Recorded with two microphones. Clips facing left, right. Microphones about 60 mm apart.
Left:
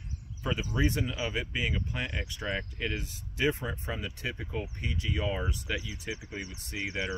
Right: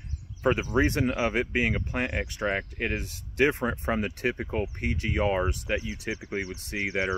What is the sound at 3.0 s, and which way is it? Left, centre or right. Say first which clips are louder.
Speech: right 6 dB; right.